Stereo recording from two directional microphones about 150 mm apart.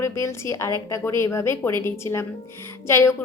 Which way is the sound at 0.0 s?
20° left (ahead or behind).